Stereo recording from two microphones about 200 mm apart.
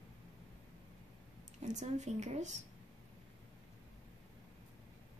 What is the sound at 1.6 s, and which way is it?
Speech, 35° right (ahead or behind).